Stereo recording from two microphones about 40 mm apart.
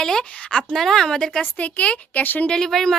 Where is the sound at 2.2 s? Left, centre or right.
Left.